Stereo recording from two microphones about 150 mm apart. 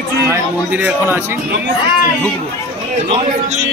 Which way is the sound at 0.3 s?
10° right (ahead or behind).